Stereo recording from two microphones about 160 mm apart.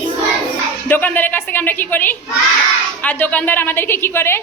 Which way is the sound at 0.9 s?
10° left (ahead or behind).